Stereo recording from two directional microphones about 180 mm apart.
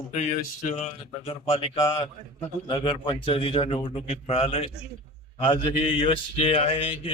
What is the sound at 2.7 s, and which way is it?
A man's voice, 25° left (ahead or behind).